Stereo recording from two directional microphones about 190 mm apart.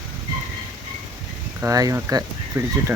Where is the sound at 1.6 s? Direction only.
20° right (ahead or behind).